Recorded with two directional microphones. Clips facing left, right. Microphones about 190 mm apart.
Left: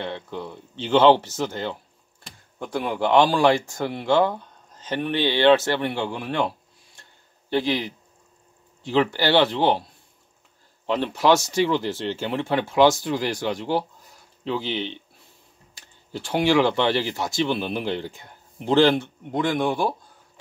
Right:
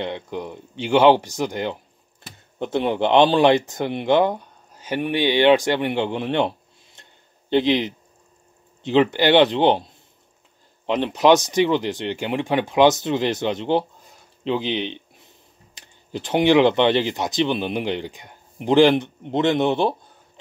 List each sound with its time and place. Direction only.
0.0 s speech: 15° right (ahead or behind)
7.0 s a sound: 20° right (ahead or behind)
8.8 s speech: 20° right (ahead or behind)